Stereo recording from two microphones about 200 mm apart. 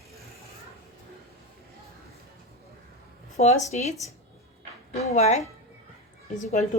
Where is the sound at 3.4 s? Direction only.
35° left (ahead or behind).